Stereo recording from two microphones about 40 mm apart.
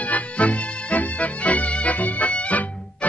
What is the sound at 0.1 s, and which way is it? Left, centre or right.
Music, left.